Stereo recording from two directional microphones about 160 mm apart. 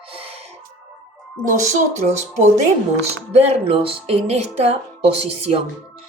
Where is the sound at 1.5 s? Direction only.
45° right (ahead or behind).